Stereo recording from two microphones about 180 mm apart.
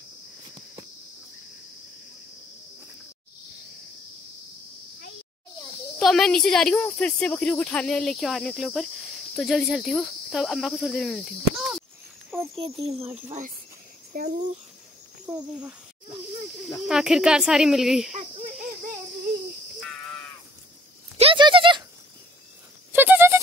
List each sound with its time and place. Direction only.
5.9 s speech: centre (ahead or behind)
13.1 s speech: 40° right (ahead or behind)
14.1 s a child's voice: 55° right (ahead or behind)
15.2 s speech: 5° right (ahead or behind)
16.8 s speech: 5° right (ahead or behind)
21.2 s a sound: 30° right (ahead or behind)
22.9 s a sound: 10° right (ahead or behind)